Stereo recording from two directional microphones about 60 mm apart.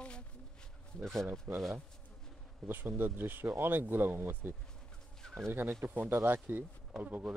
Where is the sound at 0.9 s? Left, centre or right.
Centre.